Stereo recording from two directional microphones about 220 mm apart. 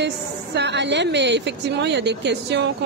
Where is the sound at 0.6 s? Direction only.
50° right (ahead or behind).